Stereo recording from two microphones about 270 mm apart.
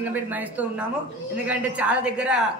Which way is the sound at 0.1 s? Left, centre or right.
Centre.